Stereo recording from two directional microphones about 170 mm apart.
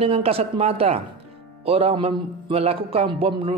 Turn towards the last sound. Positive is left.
turn(degrees=-35)  # may be behind; listen again after turning